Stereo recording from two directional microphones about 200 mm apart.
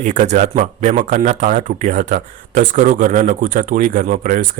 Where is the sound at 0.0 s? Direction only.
35° right (ahead or behind).